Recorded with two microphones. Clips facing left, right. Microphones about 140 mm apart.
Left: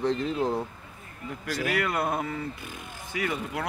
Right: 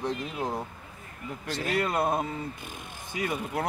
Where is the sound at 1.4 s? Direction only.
25° right (ahead or behind).